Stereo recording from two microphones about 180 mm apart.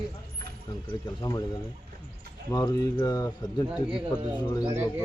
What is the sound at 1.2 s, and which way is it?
Speech, 20° left (ahead or behind).